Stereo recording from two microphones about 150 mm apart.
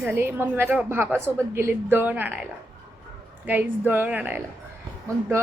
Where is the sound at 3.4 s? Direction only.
10° right (ahead or behind).